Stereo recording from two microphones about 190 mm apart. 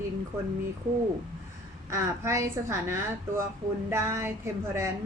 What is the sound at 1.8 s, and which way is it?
A woman's voice, 15° right (ahead or behind).